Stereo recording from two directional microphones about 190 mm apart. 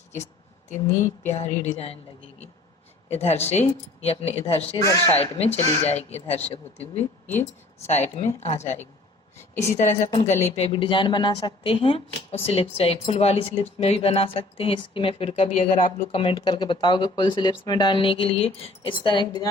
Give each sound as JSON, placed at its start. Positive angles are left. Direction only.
{"t": 0.9, "sound": "speech", "side_deg": 15}
{"t": 1.3, "sound": "speech", "side_deg": 35}
{"t": 3.1, "sound": "speech", "side_deg": 35}
{"t": 10.1, "sound": "a woman's voice", "side_deg": 30}